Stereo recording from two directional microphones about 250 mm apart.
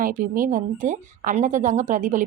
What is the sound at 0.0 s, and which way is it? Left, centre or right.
A woman's voice, right.